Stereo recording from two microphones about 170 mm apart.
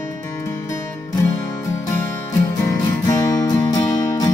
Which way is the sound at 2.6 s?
20° left (ahead or behind).